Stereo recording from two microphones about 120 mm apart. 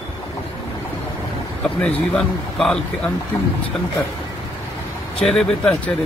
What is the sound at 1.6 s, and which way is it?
A man's voice, 10° left (ahead or behind).